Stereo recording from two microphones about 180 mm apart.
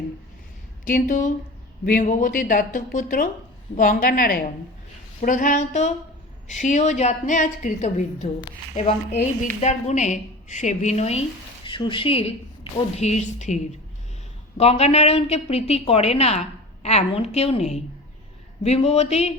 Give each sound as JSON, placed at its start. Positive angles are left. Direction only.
{"t": 0.9, "sound": "a woman's voice", "side_deg": 50}
{"t": 14.6, "sound": "a woman's voice", "side_deg": 35}